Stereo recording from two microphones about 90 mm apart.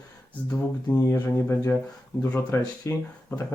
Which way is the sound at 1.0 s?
30° left (ahead or behind).